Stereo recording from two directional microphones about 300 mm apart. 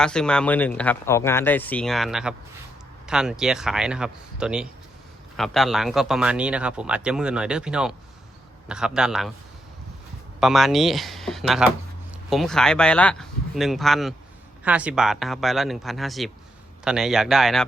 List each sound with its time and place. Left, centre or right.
0.0 s a man's voice: centre
10.4 s a man's voice: centre